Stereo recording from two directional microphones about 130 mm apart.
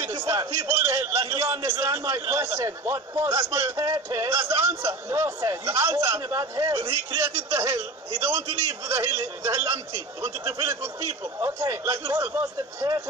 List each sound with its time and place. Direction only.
0.0 s a man's voice: 25° right (ahead or behind)